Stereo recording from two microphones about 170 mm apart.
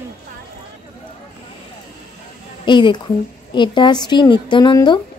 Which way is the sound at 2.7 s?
25° left (ahead or behind).